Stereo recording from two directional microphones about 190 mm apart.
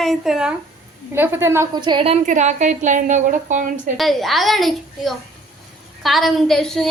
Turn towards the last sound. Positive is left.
turn(degrees=0)  # may be behind; listen again after turning